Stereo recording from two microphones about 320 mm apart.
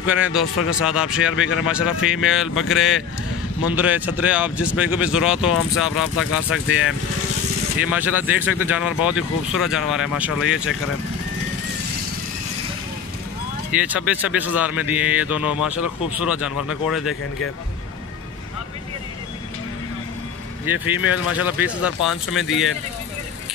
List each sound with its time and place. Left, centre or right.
0.0 s speech: centre
6.1 s speech: left
7.9 s speech: centre
13.7 s speech: centre
20.8 s speech: centre